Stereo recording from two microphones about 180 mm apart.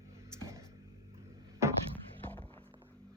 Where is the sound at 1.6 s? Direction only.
15° right (ahead or behind).